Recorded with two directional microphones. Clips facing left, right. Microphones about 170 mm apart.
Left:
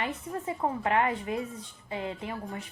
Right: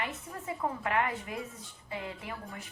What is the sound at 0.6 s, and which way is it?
A woman's voice, 30° left (ahead or behind).